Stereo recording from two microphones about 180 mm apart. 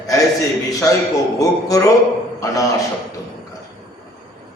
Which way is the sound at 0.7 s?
20° left (ahead or behind).